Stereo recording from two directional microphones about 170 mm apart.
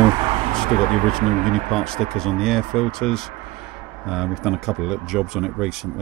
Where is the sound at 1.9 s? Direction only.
5° left (ahead or behind).